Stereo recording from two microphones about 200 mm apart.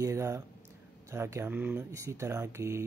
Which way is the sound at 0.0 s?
15° right (ahead or behind).